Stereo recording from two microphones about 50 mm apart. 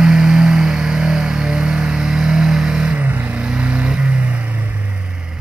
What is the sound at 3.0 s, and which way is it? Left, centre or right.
Vehicle, right.